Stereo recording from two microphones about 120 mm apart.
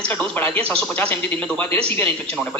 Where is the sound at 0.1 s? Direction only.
15° left (ahead or behind).